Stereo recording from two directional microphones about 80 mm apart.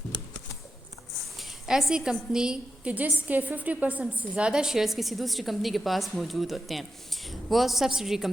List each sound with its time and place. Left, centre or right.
1.4 s a woman's voice: centre